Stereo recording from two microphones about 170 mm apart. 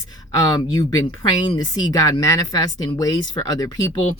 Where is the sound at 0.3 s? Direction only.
25° left (ahead or behind).